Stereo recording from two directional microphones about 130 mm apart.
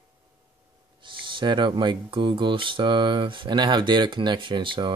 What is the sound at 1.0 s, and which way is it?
Speech, 40° right (ahead or behind).